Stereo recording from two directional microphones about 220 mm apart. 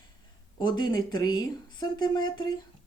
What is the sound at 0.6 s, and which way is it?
Speech, 20° left (ahead or behind).